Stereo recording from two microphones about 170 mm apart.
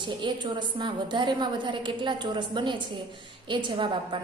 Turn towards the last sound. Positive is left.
turn(degrees=-30)  # may be behind; listen again after turning